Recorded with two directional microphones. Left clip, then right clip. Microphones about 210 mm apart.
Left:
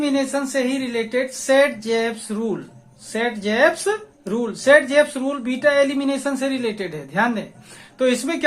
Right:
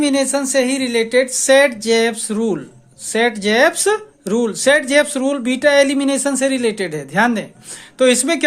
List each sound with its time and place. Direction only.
0.0 s speech: 40° right (ahead or behind)